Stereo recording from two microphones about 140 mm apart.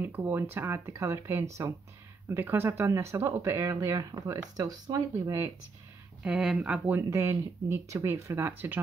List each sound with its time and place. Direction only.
0.0 s speech: 15° right (ahead or behind)
6.2 s speech: 5° right (ahead or behind)